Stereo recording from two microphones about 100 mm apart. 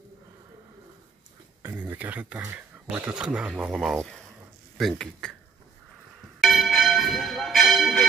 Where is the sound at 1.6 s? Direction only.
20° right (ahead or behind); by 5.3 s 5° left (ahead or behind).